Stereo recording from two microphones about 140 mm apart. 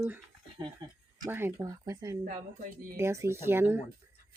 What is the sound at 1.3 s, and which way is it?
Speech, 15° right (ahead or behind).